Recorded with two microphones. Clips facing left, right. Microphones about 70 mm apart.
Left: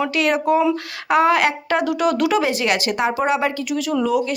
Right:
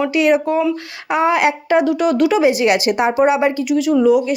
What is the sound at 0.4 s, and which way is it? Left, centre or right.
Speech, centre.